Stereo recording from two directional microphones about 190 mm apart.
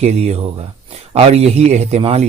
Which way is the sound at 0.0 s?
35° right (ahead or behind).